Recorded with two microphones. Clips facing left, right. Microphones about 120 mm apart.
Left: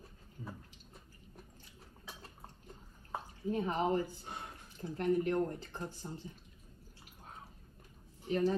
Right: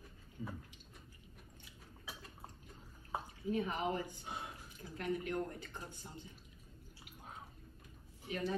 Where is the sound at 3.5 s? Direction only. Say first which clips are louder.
Left 4 dB; 35° left (ahead or behind).